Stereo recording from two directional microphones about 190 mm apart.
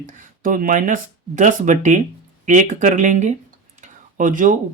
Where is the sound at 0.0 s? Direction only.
45° right (ahead or behind).